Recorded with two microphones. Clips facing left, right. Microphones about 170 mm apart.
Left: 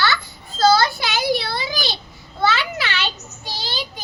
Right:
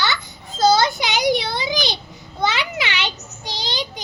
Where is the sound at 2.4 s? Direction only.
15° right (ahead or behind).